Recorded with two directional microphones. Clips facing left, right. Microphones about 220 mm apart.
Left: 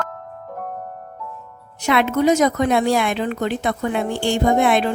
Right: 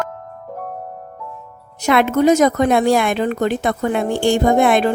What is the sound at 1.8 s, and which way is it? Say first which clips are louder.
Speech: right 3 dB; 45° right (ahead or behind).